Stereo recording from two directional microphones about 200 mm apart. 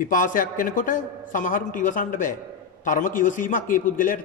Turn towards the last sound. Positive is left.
turn(degrees=40)  # may be behind; listen again after turning